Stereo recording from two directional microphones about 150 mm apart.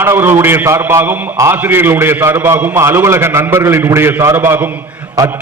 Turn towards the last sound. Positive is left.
turn(degrees=-20)  # may be behind; listen again after turning